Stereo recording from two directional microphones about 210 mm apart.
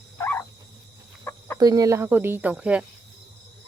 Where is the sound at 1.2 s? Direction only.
15° left (ahead or behind).